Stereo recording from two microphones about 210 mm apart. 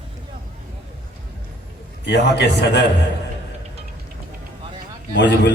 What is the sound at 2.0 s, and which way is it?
Speech, 55° left (ahead or behind).